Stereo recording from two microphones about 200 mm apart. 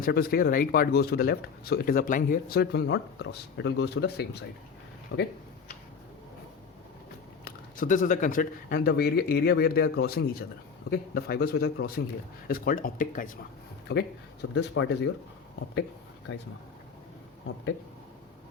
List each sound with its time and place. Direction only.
0.0 s speech: 50° left (ahead or behind)
7.4 s speech: 40° left (ahead or behind)
13.9 s speech: 55° left (ahead or behind)
16.3 s speech: 55° left (ahead or behind)